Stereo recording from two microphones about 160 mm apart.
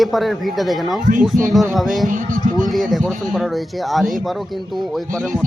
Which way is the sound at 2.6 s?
Centre (ahead or behind).